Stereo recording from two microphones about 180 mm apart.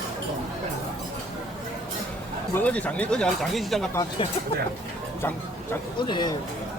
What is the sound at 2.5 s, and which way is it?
Speech, 10° left (ahead or behind).